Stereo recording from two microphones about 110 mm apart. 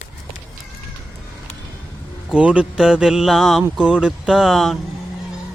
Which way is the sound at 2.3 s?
10° right (ahead or behind).